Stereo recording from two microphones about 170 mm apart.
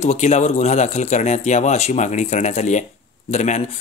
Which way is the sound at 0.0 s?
40° left (ahead or behind).